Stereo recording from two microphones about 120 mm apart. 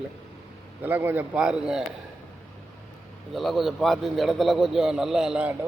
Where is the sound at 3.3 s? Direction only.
Centre (ahead or behind).